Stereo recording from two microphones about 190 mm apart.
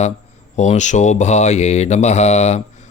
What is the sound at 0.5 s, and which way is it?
Mantra, 35° left (ahead or behind).